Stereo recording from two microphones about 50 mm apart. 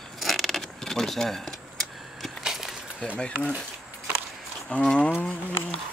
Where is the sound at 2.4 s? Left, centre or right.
Centre.